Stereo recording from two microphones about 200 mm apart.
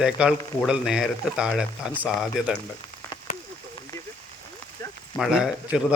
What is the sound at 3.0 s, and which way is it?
Rain on surface, 10° left (ahead or behind).